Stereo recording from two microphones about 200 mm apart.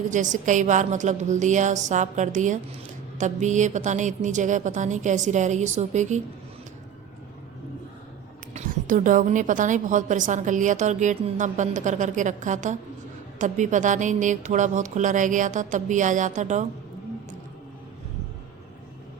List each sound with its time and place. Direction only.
0.1 s a woman's voice: 40° right (ahead or behind)
8.5 s a woman's voice: 40° right (ahead or behind)